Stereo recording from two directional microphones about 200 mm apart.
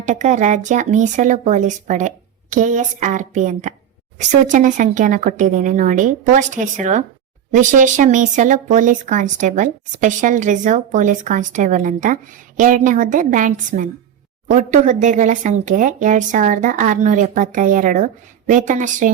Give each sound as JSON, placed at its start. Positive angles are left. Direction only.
{"t": 0.0, "sound": "speech", "side_deg": -35}